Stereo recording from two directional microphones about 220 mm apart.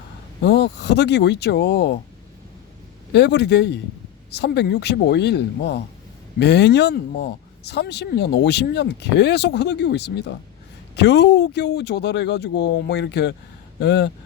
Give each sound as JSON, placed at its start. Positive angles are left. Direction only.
{"t": 0.4, "sound": "speech", "side_deg": 50}
{"t": 3.1, "sound": "speech", "side_deg": 50}